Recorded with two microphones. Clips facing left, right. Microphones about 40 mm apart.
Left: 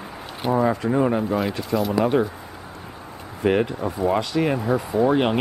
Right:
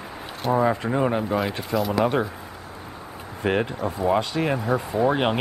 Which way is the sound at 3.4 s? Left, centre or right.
Centre.